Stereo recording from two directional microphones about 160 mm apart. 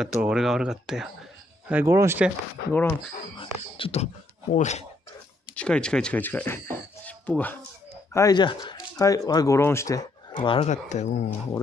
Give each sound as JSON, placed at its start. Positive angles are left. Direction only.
{"t": 0.0, "sound": "speech", "side_deg": -5}
{"t": 2.7, "sound": "speech", "side_deg": 10}
{"t": 3.3, "sound": "speech", "side_deg": 35}
{"t": 5.6, "sound": "speech", "side_deg": 5}
{"t": 8.1, "sound": "speech", "side_deg": 25}
{"t": 10.3, "sound": "speech", "side_deg": 35}
{"t": 10.7, "sound": "speech", "side_deg": 45}